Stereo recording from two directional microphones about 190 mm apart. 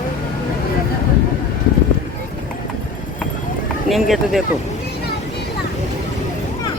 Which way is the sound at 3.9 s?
Centre (ahead or behind).